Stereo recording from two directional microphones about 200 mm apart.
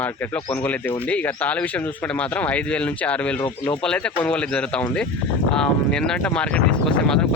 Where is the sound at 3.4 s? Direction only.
20° left (ahead or behind).